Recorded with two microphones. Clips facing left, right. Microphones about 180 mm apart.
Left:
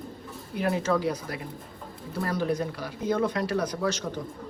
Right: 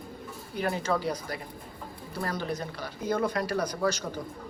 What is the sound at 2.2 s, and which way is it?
Speech, 5° left (ahead or behind).